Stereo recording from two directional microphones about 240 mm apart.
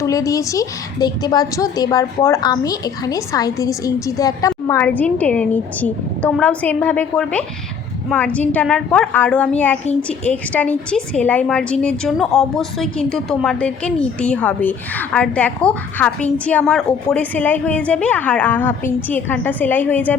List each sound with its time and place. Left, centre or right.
0.0 s a woman's voice: centre